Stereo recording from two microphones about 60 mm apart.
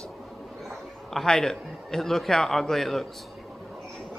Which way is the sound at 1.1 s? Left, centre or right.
Centre.